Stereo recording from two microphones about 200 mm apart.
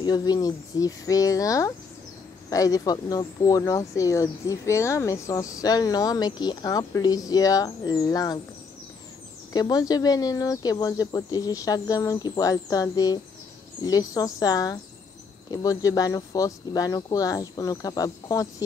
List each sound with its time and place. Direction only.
0.0 s speech: 20° left (ahead or behind)
9.5 s speech: 20° left (ahead or behind)